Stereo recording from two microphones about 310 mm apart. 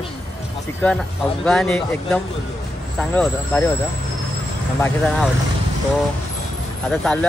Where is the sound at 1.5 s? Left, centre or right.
Centre.